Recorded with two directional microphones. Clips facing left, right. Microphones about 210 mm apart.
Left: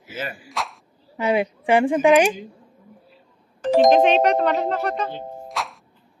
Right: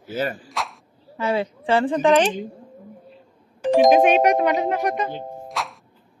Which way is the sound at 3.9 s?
10° right (ahead or behind).